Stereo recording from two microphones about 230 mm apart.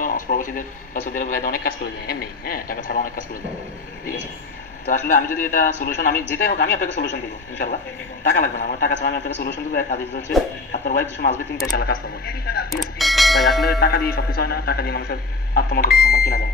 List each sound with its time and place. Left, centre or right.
0.0 s speech: left
4.8 s a man's voice: left
13.0 s speech: centre
13.7 s a man's voice: left